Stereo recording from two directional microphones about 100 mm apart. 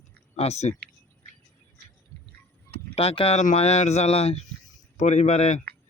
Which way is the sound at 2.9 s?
90° left.